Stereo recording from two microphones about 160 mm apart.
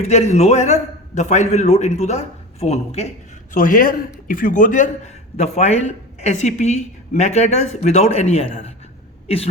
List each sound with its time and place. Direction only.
0.0 s a man's voice: 45° left (ahead or behind)
3.5 s a man's voice: 55° left (ahead or behind); by 9.5 s 40° left (ahead or behind)